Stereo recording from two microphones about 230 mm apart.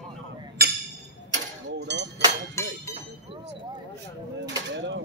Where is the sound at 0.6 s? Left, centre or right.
Right.